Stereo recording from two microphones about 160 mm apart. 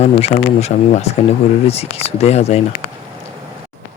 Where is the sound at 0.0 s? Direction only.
40° left (ahead or behind).